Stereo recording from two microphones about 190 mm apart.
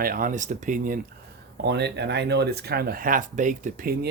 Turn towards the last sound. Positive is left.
turn(degrees=-50)  # may be behind; listen again after turning